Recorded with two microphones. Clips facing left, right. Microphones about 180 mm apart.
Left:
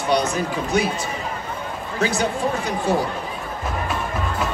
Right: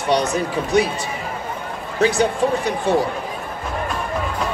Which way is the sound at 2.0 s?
35° right (ahead or behind).